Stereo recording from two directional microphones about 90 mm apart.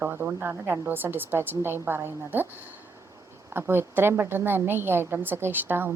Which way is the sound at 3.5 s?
25° right (ahead or behind).